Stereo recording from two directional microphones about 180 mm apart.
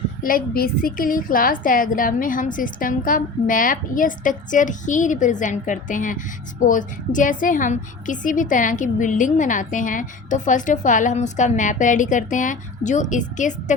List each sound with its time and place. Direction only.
0.2 s a woman's voice: 50° left (ahead or behind)